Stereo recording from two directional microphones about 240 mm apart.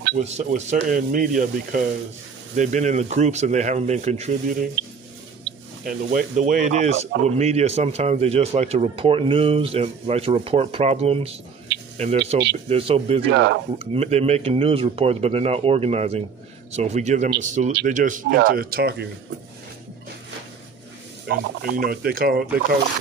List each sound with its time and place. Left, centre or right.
0.0 s speech: right
5.9 s speech: right
13.3 s speech: right
13.9 s speech: right
21.3 s speech: right